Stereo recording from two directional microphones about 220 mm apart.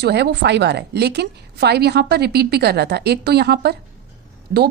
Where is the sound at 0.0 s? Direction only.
50° right (ahead or behind).